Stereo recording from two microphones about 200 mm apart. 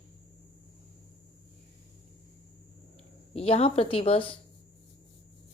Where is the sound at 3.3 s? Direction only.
30° left (ahead or behind).